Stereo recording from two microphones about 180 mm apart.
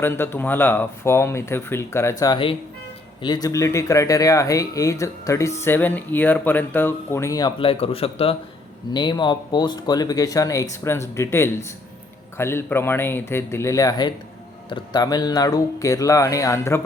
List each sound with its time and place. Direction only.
0.0 s speech: 10° left (ahead or behind)